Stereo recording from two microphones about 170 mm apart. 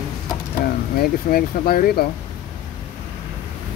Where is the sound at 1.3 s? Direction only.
60° left (ahead or behind).